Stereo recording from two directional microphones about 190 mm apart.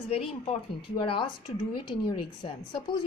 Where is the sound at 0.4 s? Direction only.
30° left (ahead or behind).